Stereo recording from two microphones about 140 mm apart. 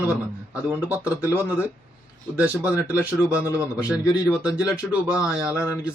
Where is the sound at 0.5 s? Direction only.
10° right (ahead or behind).